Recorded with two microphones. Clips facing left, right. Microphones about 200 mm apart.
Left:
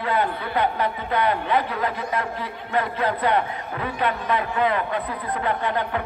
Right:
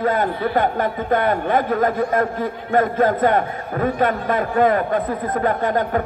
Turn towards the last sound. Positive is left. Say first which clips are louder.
# right 5 dB
turn(degrees=-45)  # may be behind; listen again after turning